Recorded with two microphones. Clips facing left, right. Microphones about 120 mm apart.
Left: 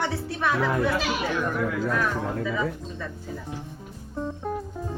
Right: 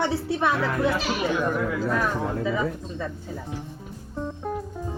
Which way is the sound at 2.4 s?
25° right (ahead or behind).